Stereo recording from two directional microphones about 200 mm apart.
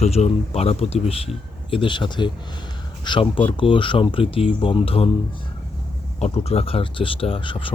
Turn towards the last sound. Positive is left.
turn(degrees=25)  # may be behind; listen again after turning